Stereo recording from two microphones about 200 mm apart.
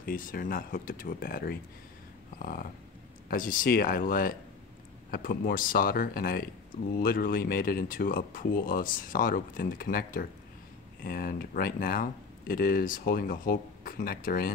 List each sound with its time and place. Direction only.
0.0 s speech: 45° left (ahead or behind)
2.3 s dog: 45° left (ahead or behind)
3.3 s speech: 45° left (ahead or behind)